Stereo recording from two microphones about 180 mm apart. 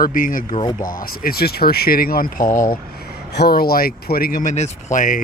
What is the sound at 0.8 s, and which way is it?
Speech, 50° left (ahead or behind).